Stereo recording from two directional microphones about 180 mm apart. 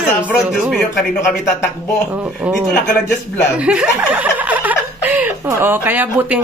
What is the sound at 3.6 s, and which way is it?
A woman's voice, 5° right (ahead or behind).